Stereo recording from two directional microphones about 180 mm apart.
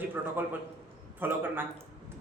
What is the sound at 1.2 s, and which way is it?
Speech, 10° right (ahead or behind).